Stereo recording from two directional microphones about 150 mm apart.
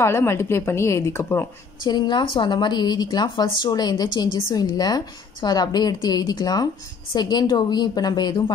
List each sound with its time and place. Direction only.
0.0 s a woman's voice: 15° left (ahead or behind)
1.9 s speech: 30° left (ahead or behind)